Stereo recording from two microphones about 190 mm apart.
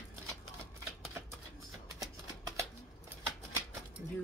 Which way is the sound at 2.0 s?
20° right (ahead or behind).